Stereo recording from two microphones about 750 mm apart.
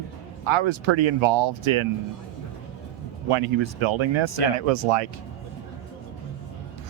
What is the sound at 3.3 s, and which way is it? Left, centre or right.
Speech, right.